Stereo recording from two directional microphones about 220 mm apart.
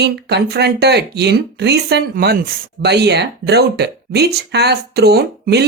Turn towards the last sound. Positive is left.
turn(degrees=-45)  # may be behind; listen again after turning